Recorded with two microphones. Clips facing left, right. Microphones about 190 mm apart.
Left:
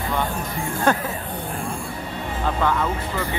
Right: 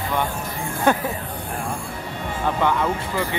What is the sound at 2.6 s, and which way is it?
Speech, 15° right (ahead or behind).